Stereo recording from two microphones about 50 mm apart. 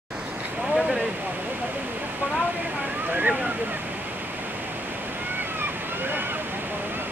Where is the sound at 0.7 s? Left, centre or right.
Centre.